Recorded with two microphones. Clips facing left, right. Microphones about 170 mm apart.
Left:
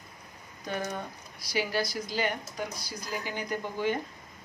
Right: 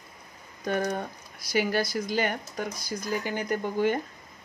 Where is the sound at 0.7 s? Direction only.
55° right (ahead or behind).